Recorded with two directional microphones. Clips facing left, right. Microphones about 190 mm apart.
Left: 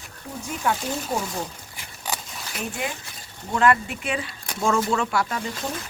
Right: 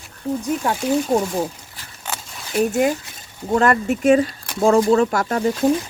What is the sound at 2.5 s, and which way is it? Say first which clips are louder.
Speech: right 13 dB; 45° right (ahead or behind).